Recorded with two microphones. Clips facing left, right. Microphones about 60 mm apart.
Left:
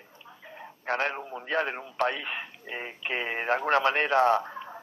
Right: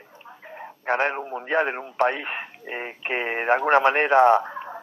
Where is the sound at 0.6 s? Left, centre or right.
Right.